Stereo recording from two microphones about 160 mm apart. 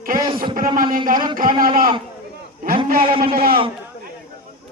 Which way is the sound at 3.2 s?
70° right (ahead or behind).